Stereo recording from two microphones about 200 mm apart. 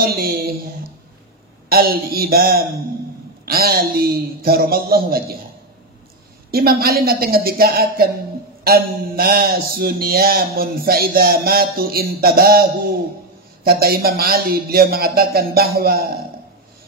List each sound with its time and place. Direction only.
0.0 s a sound: 50° right (ahead or behind)
1.7 s a man's voice: 50° right (ahead or behind)
6.5 s a man's voice: 50° right (ahead or behind)
13.7 s a man's voice: 50° right (ahead or behind)